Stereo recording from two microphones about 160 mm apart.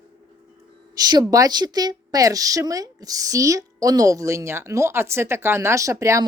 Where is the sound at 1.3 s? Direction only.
25° right (ahead or behind).